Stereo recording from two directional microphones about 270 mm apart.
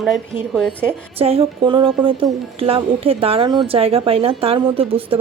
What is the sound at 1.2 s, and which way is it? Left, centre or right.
A woman's voice, right.